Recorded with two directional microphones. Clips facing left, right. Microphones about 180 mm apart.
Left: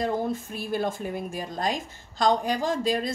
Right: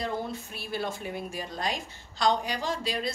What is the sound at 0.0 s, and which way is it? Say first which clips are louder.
Speech: left 6 dB; 45° left (ahead or behind).